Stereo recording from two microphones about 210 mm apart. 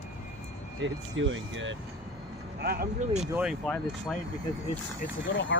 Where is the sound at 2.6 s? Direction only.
45° right (ahead or behind).